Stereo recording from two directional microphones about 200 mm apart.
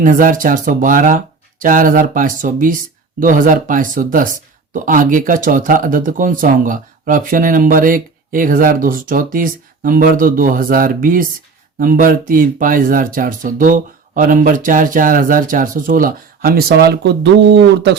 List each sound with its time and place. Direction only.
0.0 s speech: 40° right (ahead or behind); by 17.9 s 60° right (ahead or behind)